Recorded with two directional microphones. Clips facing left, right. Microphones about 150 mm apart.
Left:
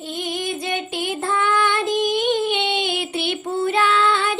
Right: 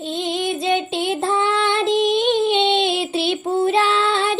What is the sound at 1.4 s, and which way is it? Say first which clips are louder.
Child singing: right 1 dB; 25° right (ahead or behind).